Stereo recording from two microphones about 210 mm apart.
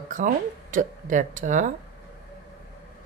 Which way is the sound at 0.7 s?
40° right (ahead or behind).